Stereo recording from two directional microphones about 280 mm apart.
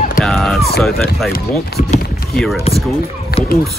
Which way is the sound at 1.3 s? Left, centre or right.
Left.